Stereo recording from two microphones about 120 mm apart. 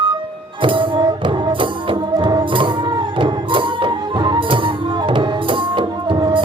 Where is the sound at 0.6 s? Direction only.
45° right (ahead or behind).